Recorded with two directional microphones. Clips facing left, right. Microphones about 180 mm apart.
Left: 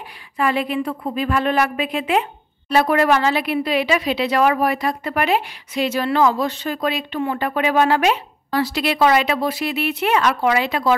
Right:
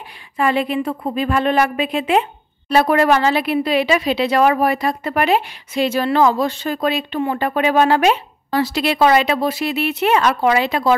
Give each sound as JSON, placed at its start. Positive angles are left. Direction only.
{"t": 0.4, "sound": "speech", "side_deg": -25}